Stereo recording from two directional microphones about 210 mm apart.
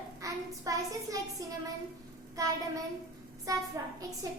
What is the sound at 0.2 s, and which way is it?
A child's voice, 15° right (ahead or behind).